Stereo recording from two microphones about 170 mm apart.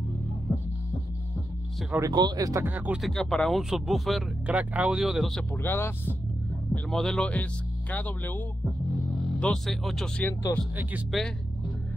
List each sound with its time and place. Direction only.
2.0 s speech: 20° right (ahead or behind)
3.1 s speech: centre (ahead or behind)